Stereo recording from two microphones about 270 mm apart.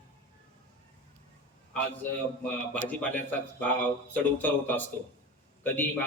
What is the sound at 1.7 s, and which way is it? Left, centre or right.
A man's voice, centre.